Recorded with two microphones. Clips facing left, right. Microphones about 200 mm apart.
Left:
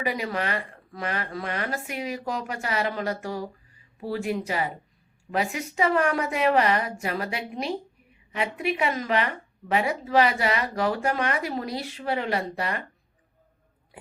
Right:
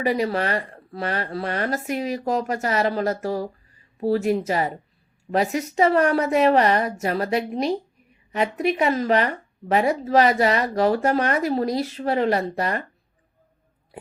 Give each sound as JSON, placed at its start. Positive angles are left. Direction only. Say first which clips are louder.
{"t": 0.0, "sound": "speech", "louder": "right 6 dB", "side_deg": -35}